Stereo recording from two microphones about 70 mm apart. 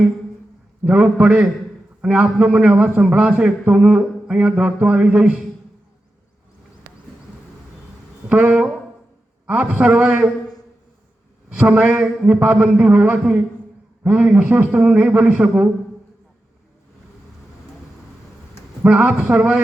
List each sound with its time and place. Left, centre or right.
0.9 s a man's voice: centre
8.3 s a man's voice: centre
11.4 s a man's voice: centre
18.9 s a man's voice: centre